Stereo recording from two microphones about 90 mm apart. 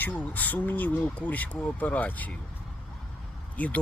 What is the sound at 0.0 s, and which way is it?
Speech, 20° left (ahead or behind).